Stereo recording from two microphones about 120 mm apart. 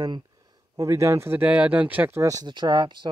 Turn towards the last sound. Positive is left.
turn(degrees=-35)  # may be behind; listen again after turning